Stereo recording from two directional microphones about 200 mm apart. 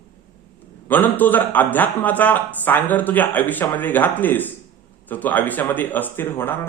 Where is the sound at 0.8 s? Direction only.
10° left (ahead or behind).